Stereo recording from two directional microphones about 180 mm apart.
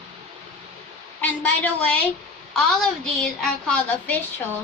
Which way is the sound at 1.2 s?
5° left (ahead or behind).